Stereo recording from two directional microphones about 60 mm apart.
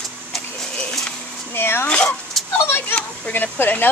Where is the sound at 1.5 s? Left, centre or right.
Left.